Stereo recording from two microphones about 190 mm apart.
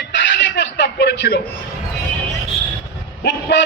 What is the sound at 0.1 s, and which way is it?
Music, 65° left (ahead or behind).